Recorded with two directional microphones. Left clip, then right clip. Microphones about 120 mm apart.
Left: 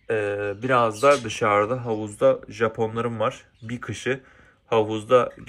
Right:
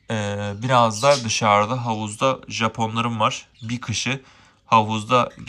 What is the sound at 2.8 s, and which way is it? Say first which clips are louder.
Speech: right 3 dB; 35° right (ahead or behind).